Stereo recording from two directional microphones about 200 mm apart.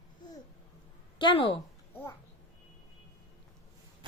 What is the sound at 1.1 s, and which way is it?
Speech, 25° left (ahead or behind).